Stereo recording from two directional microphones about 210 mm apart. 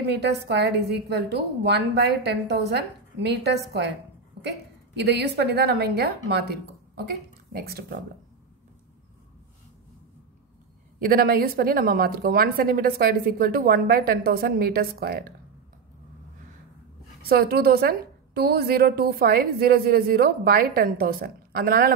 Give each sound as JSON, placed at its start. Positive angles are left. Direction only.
{"t": 0.0, "sound": "a woman's voice", "side_deg": -50}
{"t": 7.5, "sound": "a woman's voice", "side_deg": -50}
{"t": 11.0, "sound": "a woman's voice", "side_deg": -45}
{"t": 17.3, "sound": "a woman's voice", "side_deg": -45}